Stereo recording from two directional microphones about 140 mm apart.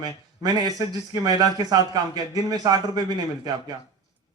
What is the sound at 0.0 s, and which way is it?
Speech, 30° right (ahead or behind).